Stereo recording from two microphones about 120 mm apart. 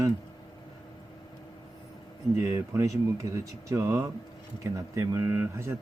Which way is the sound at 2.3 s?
20° right (ahead or behind).